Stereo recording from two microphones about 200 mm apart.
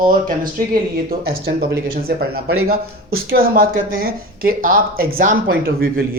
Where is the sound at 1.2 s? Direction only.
50° right (ahead or behind).